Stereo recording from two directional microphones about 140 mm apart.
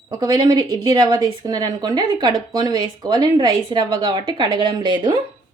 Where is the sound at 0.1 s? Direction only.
30° right (ahead or behind).